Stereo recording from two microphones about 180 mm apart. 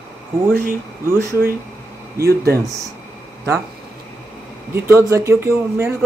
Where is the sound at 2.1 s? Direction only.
60° right (ahead or behind).